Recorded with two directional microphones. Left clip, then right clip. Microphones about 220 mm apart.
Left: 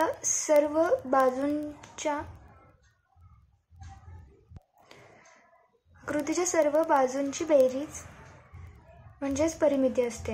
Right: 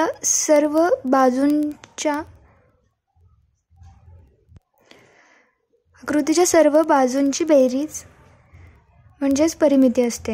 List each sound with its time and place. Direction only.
0.0 s a woman's voice: 50° right (ahead or behind)
4.9 s a sound: 45° right (ahead or behind)
5.9 s a woman's voice: 50° right (ahead or behind)
9.2 s a woman's voice: 50° right (ahead or behind)